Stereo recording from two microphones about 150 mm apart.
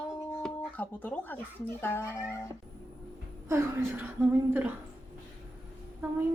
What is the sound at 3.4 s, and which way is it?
A woman's voice, 20° right (ahead or behind).